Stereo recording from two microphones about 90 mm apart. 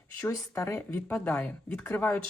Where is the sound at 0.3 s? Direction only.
35° left (ahead or behind).